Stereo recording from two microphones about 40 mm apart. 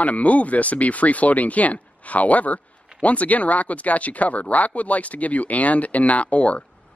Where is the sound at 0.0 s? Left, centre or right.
Left.